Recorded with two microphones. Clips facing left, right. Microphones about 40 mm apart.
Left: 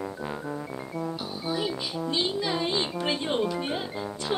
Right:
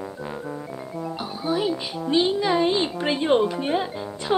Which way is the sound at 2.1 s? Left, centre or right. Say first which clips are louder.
Right 8 dB; centre.